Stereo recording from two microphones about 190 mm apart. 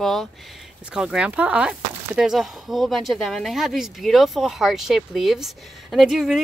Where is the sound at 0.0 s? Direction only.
Centre (ahead or behind).